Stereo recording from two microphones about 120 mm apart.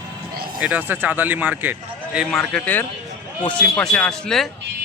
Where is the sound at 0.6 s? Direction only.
10° right (ahead or behind).